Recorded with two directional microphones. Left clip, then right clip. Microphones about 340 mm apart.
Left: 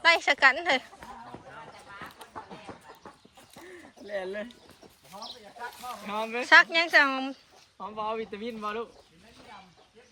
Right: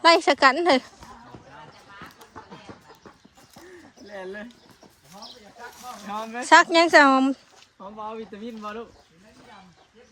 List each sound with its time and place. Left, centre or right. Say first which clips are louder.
0.0 s speech: right 5 dB; centre
4.1 s speech: left 2 dB; centre
6.1 s speech: right 4 dB; centre
8.0 s speech: left 2 dB; centre